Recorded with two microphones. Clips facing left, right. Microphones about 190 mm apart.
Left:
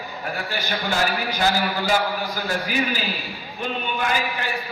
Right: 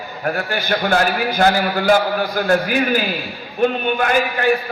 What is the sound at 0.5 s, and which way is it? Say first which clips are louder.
A man's voice: right 8 dB; 60° right (ahead or behind).